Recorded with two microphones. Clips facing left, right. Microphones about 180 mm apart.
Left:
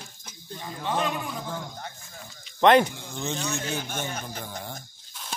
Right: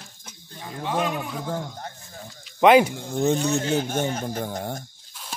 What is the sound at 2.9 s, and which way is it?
Speech, 45° right (ahead or behind).